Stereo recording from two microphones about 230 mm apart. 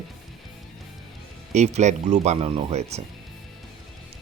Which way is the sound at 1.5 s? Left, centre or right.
Right.